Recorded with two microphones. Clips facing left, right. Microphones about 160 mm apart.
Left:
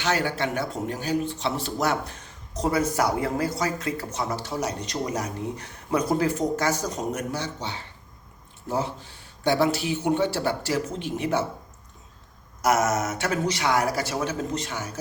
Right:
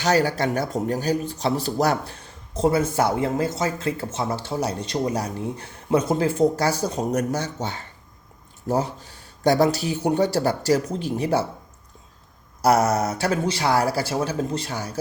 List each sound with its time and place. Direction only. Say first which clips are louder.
0.0 s speech: right 5 dB; 40° right (ahead or behind)
12.6 s speech: right 4 dB; 35° right (ahead or behind)